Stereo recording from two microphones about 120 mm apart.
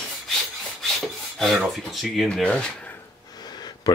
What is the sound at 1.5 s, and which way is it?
Speech, centre (ahead or behind).